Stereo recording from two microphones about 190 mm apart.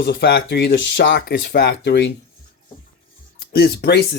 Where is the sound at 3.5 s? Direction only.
55° left (ahead or behind).